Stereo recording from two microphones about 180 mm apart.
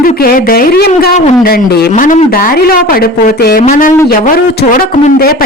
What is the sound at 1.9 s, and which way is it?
Speech, 45° left (ahead or behind).